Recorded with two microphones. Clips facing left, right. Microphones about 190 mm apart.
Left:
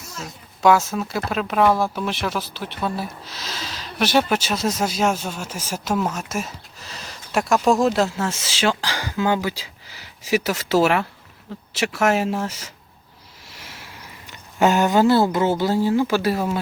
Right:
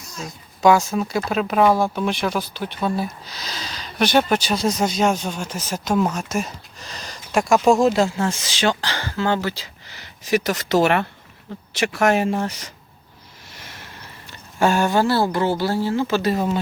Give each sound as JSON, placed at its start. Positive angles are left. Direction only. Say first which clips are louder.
{"t": 0.2, "sound": "speech", "louder": "right 2 dB", "side_deg": 0}